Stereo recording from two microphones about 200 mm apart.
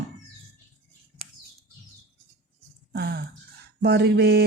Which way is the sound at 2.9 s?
55° right (ahead or behind).